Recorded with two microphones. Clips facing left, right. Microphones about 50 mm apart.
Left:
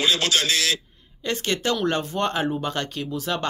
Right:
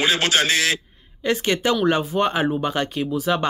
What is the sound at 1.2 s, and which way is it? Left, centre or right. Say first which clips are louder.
Speech: right 4 dB; centre.